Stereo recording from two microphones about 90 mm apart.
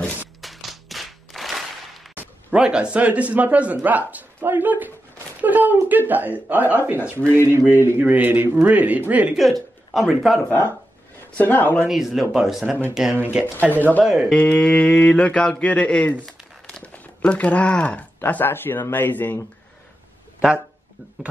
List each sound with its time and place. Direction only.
0.4 s a sound: centre (ahead or behind)
2.1 s speech: 10° right (ahead or behind)
9.4 s speech: centre (ahead or behind)
11.3 s speech: 20° left (ahead or behind)
11.9 s speech: 5° right (ahead or behind)
13.7 s speech: 20° left (ahead or behind)
14.0 s speech: 10° right (ahead or behind)
14.3 s mantra: 10° left (ahead or behind)
15.6 s crumpling: 15° left (ahead or behind)
16.9 s speech: 15° left (ahead or behind)
20.3 s speech: 10° right (ahead or behind)